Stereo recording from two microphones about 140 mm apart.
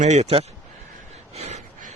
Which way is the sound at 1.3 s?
50° right (ahead or behind).